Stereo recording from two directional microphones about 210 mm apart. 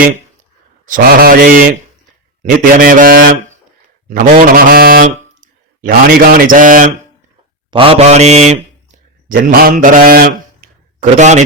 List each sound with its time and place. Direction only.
0.9 s a man's voice: 45° right (ahead or behind)
7.7 s speech: 25° right (ahead or behind)
9.3 s a man's voice: 45° right (ahead or behind)